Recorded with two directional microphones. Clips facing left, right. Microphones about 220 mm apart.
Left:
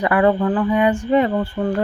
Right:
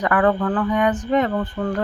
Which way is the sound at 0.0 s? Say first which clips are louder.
Left 2 dB; 10° left (ahead or behind).